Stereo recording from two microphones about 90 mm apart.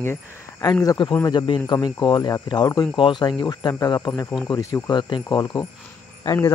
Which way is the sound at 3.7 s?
45° left (ahead or behind).